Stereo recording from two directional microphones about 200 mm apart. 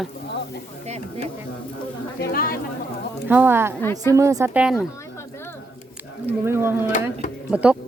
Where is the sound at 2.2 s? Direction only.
50° left (ahead or behind).